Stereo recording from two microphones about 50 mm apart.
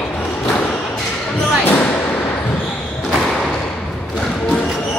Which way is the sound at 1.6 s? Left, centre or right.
Left.